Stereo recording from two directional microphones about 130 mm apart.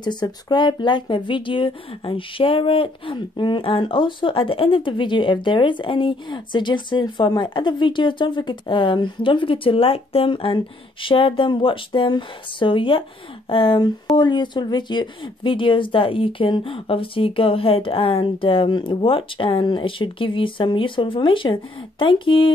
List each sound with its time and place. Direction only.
0.0 s speech: 35° left (ahead or behind)